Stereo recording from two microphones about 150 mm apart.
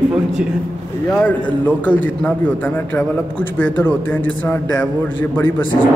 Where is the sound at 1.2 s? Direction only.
10° left (ahead or behind).